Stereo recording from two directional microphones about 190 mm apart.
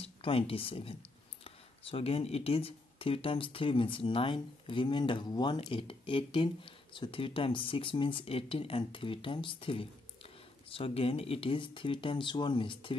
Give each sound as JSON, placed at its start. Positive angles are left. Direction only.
{"t": 0.0, "sound": "speech", "side_deg": 30}